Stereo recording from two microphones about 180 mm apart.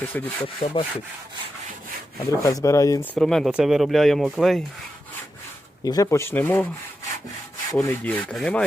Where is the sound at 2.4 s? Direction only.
15° left (ahead or behind); by 4.6 s centre (ahead or behind).